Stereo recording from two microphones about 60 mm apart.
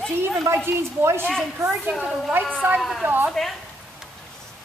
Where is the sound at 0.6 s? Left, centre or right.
Right.